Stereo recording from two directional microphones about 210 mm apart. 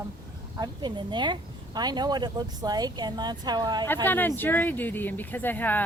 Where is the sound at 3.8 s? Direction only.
10° left (ahead or behind).